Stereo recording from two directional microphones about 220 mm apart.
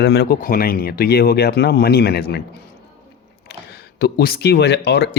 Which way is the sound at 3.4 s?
45° left (ahead or behind).